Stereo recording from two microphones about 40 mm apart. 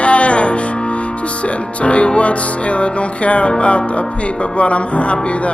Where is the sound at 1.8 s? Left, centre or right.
Left.